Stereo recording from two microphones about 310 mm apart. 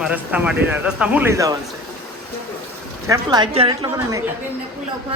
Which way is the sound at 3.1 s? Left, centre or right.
Centre.